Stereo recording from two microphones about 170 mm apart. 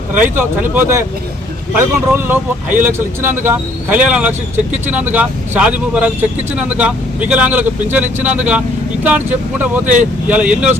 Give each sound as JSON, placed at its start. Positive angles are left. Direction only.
{"t": 0.1, "sound": "speech", "side_deg": -10}